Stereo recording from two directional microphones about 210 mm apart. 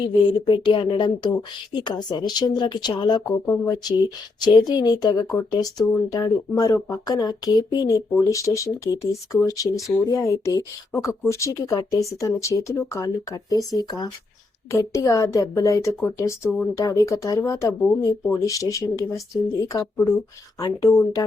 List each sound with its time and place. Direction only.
0.0 s a woman's voice: 20° left (ahead or behind)
5.7 s speech: 5° left (ahead or behind)
6.1 s speech: 15° left (ahead or behind)
14.7 s speech: 15° left (ahead or behind)